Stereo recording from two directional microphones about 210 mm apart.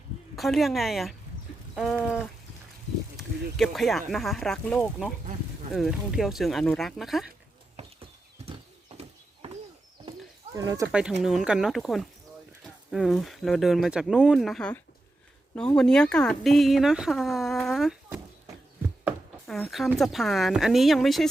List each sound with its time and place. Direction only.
0.3 s speech: centre (ahead or behind)
7.8 s horse: 30° right (ahead or behind)
10.1 s a sound: 15° right (ahead or behind)
11.2 s speech: centre (ahead or behind)